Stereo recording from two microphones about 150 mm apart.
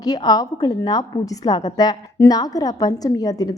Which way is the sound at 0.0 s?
25° left (ahead or behind).